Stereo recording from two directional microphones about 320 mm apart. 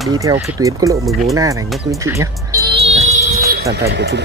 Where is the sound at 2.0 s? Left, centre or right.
Centre.